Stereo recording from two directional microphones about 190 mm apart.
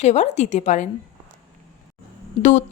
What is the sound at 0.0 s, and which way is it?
Speech, 35° left (ahead or behind).